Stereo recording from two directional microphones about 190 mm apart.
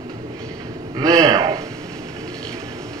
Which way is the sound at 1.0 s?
20° right (ahead or behind).